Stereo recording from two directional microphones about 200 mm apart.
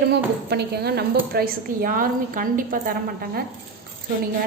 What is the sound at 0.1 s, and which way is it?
A woman's voice, 55° right (ahead or behind).